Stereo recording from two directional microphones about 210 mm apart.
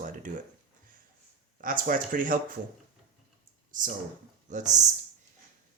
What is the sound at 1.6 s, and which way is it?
Speech, 40° right (ahead or behind).